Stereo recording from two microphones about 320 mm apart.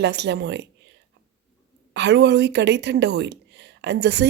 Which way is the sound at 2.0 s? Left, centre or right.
Right.